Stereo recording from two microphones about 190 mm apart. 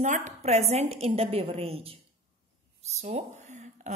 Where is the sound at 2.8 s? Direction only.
35° right (ahead or behind).